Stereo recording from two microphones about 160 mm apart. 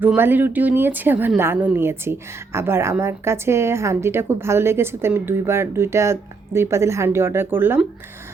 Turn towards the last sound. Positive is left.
turn(degrees=-15)  # may be behind; listen again after turning